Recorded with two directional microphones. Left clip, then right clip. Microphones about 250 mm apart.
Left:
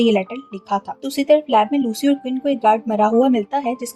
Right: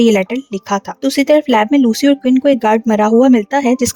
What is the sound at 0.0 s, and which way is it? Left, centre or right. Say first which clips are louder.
Speech: right 5 dB; right.